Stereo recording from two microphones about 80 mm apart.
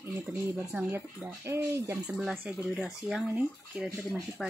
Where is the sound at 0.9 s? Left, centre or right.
Right.